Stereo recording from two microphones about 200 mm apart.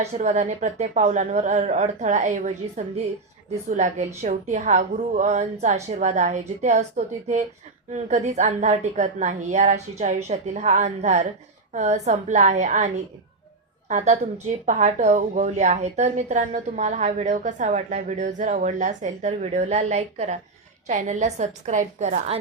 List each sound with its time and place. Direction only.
0.1 s a woman's voice: 35° right (ahead or behind)